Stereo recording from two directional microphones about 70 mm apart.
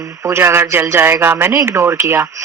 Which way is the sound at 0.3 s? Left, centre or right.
Right.